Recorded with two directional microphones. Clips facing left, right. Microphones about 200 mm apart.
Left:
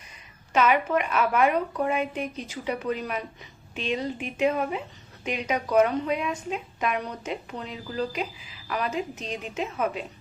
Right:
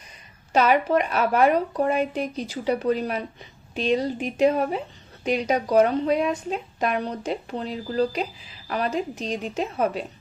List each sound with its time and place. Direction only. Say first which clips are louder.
0.5 s speech: right 3 dB; 35° right (ahead or behind)